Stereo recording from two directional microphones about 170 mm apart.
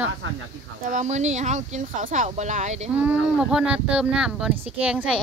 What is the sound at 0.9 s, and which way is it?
Speech, 45° right (ahead or behind).